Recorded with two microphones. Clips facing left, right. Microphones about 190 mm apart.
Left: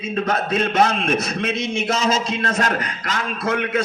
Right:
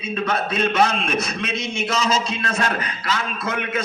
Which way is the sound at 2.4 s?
40° left (ahead or behind).